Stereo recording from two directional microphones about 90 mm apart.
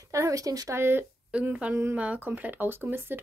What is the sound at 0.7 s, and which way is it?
Speech, 25° right (ahead or behind).